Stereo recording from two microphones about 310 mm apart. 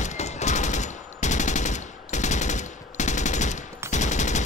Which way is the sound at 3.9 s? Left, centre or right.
Left.